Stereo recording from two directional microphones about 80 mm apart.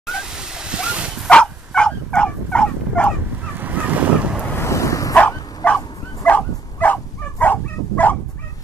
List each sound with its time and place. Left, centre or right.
0.0 s a sound: centre
1.3 s dog: centre
3.5 s waves: right
4.6 s bow-wow: left
5.1 s bow-wow: left
6.2 s dog: centre